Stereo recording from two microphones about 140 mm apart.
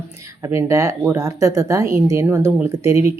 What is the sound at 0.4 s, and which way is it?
Speech, 20° right (ahead or behind).